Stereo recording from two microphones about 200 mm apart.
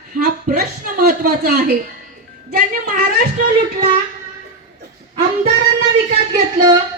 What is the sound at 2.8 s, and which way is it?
Speech, 40° right (ahead or behind).